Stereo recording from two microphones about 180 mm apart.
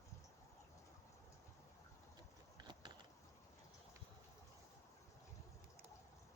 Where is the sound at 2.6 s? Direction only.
25° right (ahead or behind).